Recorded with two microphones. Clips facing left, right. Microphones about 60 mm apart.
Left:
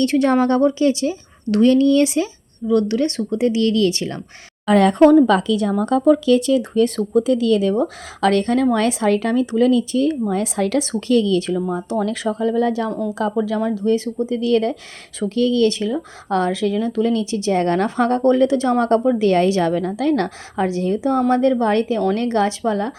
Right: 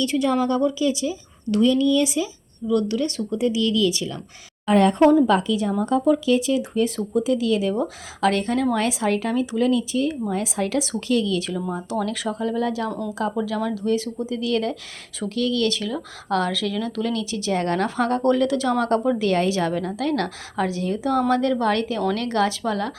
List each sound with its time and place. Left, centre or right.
0.0 s a woman's voice: left
4.6 s speech: left
5.2 s a woman's voice: left